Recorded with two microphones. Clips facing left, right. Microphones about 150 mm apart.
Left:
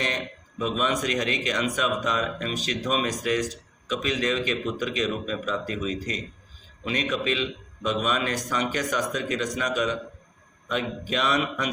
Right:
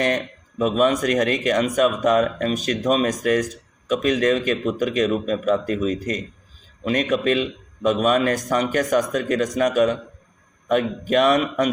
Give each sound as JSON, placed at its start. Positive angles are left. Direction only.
{"t": 0.6, "sound": "a man's voice", "side_deg": -50}